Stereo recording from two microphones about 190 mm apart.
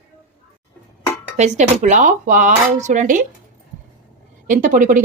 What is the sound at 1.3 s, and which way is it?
Speech, 35° right (ahead or behind).